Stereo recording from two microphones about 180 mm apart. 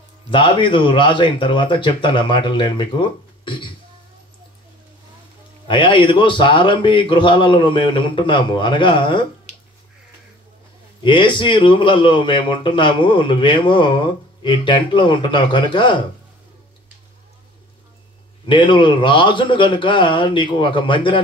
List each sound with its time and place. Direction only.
0.3 s a man's voice: 25° left (ahead or behind)
5.7 s a man's voice: 25° left (ahead or behind)
11.0 s a man's voice: 25° left (ahead or behind)
18.5 s a man's voice: 25° left (ahead or behind)